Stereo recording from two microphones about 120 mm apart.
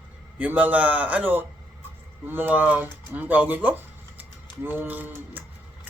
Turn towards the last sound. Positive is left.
turn(degrees=-15)  # may be behind; listen again after turning